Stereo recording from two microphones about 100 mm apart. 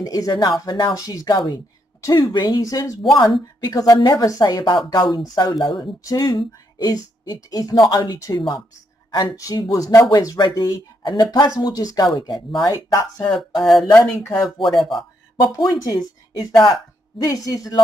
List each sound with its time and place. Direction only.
0.0 s speech: 35° left (ahead or behind)
2.0 s a sound: 35° left (ahead or behind)
2.3 s speech: 45° left (ahead or behind)
11.0 s a woman's voice: 50° left (ahead or behind)
12.2 s speech: 50° left (ahead or behind)
13.6 s speech: centre (ahead or behind)
15.5 s speech: 35° left (ahead or behind)